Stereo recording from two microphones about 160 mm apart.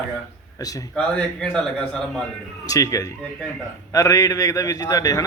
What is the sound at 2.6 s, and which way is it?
Speech, 20° left (ahead or behind).